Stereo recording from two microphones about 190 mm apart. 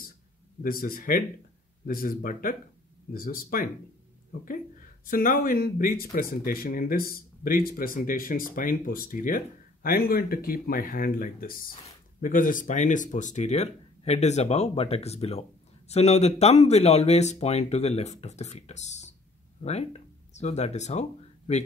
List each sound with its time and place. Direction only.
0.6 s speech: 50° left (ahead or behind)